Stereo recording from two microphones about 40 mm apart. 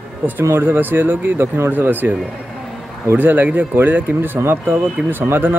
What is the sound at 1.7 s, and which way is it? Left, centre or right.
Speech, right.